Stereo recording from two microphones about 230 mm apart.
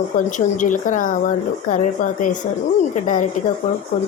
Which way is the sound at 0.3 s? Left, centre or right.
Left.